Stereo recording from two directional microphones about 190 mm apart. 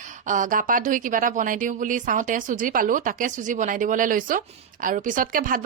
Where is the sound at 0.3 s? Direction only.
45° right (ahead or behind).